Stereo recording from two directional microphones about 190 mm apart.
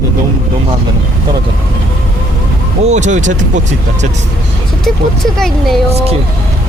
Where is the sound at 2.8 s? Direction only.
40° right (ahead or behind).